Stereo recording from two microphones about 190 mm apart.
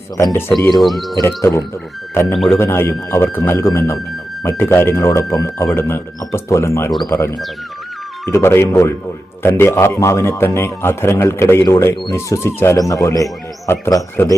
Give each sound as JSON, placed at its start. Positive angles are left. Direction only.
{"t": 0.8, "sound": "speech", "side_deg": 0}
{"t": 1.4, "sound": "a man's voice", "side_deg": 15}